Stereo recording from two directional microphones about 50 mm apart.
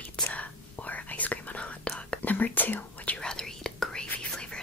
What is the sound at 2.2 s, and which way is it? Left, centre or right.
Whispering, left.